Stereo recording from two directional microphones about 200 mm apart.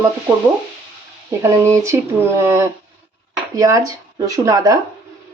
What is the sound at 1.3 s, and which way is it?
Speech, 15° right (ahead or behind).